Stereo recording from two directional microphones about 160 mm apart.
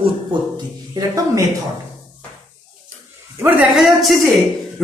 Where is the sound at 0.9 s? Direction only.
20° right (ahead or behind).